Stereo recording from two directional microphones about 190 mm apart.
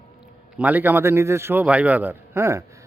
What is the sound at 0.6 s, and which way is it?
Speech, 10° right (ahead or behind).